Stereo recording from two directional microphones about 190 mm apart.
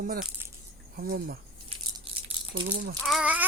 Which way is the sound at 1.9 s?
30° right (ahead or behind).